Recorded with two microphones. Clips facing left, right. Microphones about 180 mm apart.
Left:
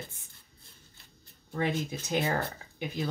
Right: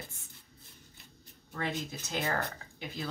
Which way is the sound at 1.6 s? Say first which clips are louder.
Left 5 dB; 15° left (ahead or behind).